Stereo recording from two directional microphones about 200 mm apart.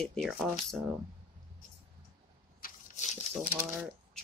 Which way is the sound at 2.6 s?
45° left (ahead or behind).